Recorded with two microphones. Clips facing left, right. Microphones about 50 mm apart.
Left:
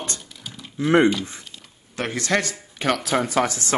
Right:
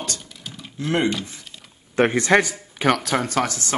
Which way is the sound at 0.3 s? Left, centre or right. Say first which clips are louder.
Right 1 dB; centre.